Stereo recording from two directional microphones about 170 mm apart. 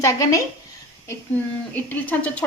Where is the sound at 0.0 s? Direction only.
20° left (ahead or behind).